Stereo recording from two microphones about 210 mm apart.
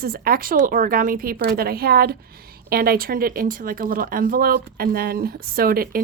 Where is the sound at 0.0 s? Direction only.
45° right (ahead or behind).